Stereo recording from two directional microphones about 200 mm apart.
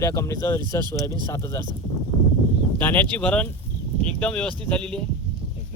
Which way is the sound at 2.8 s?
10° left (ahead or behind).